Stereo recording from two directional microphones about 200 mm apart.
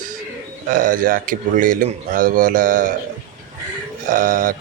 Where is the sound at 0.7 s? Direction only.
45° right (ahead or behind).